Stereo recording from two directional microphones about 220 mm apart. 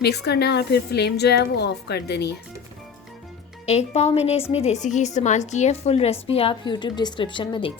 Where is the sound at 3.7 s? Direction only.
30° left (ahead or behind).